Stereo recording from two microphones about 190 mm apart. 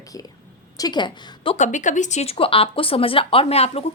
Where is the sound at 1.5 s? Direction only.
40° left (ahead or behind).